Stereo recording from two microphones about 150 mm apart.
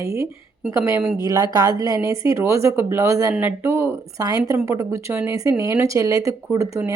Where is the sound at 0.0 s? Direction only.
20° right (ahead or behind).